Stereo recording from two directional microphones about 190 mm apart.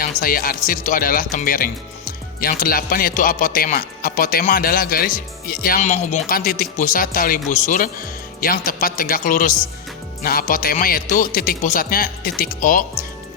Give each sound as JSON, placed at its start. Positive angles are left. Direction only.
{"t": 0.0, "sound": "speech", "side_deg": 50}